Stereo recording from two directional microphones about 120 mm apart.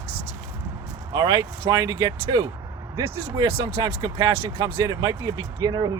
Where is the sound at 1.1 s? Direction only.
35° right (ahead or behind).